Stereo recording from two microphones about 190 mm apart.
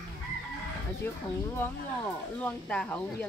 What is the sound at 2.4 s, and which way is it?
Speech, 5° left (ahead or behind).